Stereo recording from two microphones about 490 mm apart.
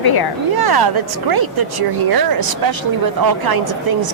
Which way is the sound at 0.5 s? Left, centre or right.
Right.